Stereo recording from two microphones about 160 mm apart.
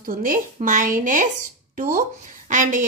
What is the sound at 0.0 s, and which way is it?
A woman's voice, 60° right (ahead or behind).